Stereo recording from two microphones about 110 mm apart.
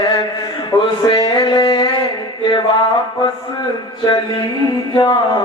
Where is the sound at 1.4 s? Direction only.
45° left (ahead or behind).